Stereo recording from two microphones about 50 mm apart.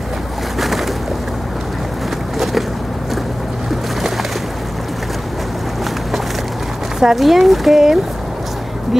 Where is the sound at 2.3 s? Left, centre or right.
Centre.